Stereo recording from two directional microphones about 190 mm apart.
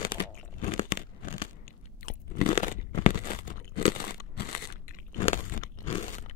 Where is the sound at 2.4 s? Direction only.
30° left (ahead or behind).